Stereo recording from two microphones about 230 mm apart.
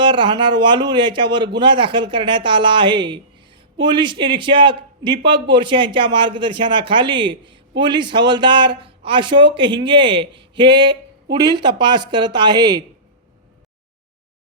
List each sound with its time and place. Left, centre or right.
0.0 s a man's voice: right